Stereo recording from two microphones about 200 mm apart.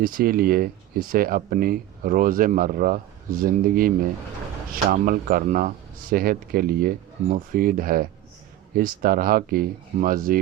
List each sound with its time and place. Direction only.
0.0 s speech: 45° right (ahead or behind)